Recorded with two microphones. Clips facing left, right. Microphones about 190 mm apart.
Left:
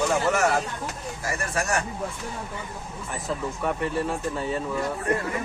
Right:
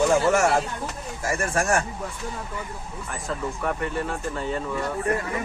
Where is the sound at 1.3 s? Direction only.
50° right (ahead or behind).